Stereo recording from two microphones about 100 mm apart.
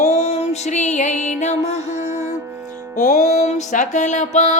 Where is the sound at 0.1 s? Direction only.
90° left.